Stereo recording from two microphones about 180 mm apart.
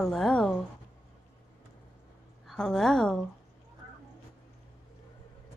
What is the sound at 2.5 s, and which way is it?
Speech, 5° left (ahead or behind).